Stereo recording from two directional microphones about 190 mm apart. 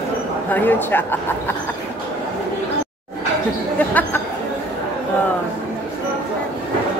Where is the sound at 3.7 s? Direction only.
10° left (ahead or behind).